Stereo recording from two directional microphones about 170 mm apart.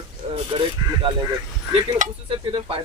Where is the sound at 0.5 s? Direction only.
30° right (ahead or behind).